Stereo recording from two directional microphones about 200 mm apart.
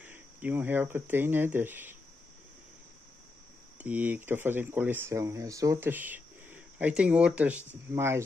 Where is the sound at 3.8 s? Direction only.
10° right (ahead or behind).